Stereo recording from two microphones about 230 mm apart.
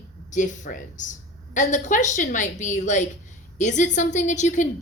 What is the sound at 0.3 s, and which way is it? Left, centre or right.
A woman's voice, left.